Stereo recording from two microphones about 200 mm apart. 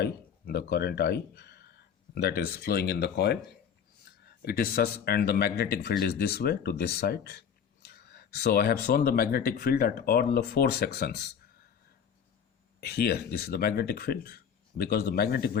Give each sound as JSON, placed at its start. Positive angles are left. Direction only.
{"t": 0.0, "sound": "speech", "side_deg": 55}
{"t": 4.4, "sound": "speech", "side_deg": 50}
{"t": 12.8, "sound": "speech", "side_deg": 55}